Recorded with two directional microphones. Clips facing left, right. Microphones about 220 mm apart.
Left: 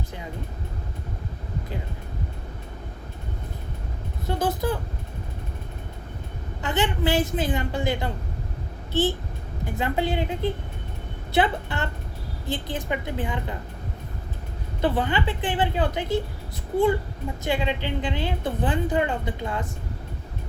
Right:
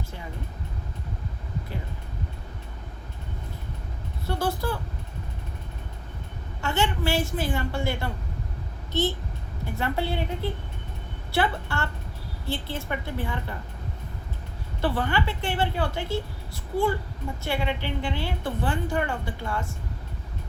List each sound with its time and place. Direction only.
4.3 s speech: 20° left (ahead or behind)
6.6 s a woman's voice: 15° left (ahead or behind)
14.8 s a woman's voice: 20° left (ahead or behind)
17.4 s a woman's voice: 15° left (ahead or behind)